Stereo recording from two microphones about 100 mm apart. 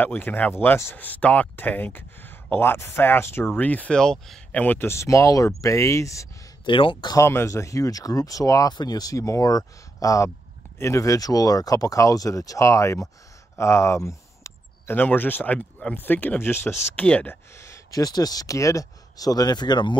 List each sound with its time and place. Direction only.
0.0 s speech: 20° left (ahead or behind)
4.6 s speech: 20° left (ahead or behind)
6.6 s speech: 55° left (ahead or behind)
7.2 s speech: 25° left (ahead or behind)
16.9 s speech: 15° left (ahead or behind)
17.6 s speech: 30° left (ahead or behind); by 20.0 s 50° left (ahead or behind)